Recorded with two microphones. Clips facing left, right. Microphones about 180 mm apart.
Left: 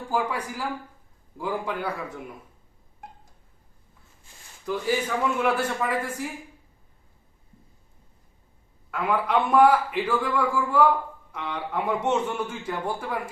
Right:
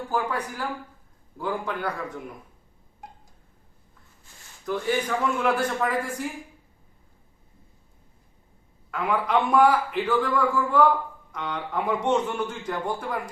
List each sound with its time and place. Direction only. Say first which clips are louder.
0.1 s a man's voice: left 1 dB; 10° left (ahead or behind)
4.6 s a man's voice: even; 5° left (ahead or behind)
8.9 s a man's voice: even; 5° left (ahead or behind)